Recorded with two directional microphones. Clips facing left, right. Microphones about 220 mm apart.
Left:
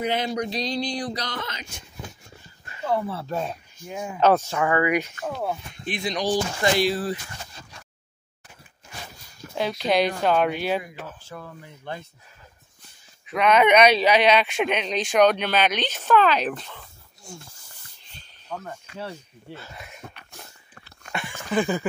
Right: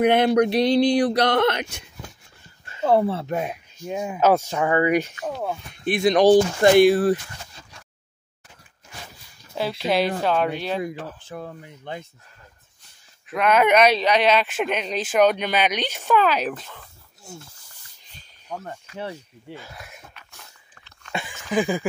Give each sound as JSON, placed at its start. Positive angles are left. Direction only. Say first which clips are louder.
{"t": 0.0, "sound": "speech", "louder": "right 9 dB", "side_deg": -60}
{"t": 2.8, "sound": "speech", "louder": "right 7 dB", "side_deg": -40}
{"t": 3.1, "sound": "speech", "louder": "right 3 dB", "side_deg": -25}
{"t": 4.6, "sound": "speech", "louder": "right 2 dB", "side_deg": -25}
{"t": 5.9, "sound": "speech", "louder": "right 10 dB", "side_deg": -55}
{"t": 9.6, "sound": "speech", "louder": "even", "side_deg": -5}
{"t": 11.2, "sound": "speech", "louder": "right 4 dB", "side_deg": -15}
{"t": 13.3, "sound": "speech", "louder": "even", "side_deg": -5}
{"t": 18.5, "sound": "speech", "louder": "right 1 dB", "side_deg": -15}
{"t": 21.5, "sound": "speech", "louder": "right 1 dB", "side_deg": -10}